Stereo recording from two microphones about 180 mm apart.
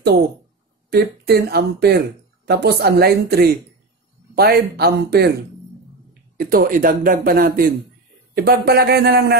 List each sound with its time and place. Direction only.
0.8 s speech: 60° right (ahead or behind)
6.3 s speech: 55° right (ahead or behind)